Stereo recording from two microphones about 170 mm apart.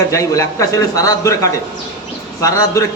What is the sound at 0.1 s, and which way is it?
A man's voice, 20° left (ahead or behind).